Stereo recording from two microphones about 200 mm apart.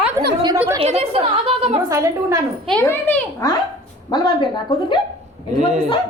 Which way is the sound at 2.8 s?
10° left (ahead or behind).